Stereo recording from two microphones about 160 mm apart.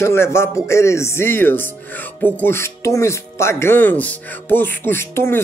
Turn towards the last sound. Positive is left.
turn(degrees=15)  # may be behind; listen again after turning